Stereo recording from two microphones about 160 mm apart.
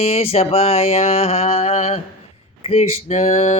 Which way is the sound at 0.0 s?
40° left (ahead or behind).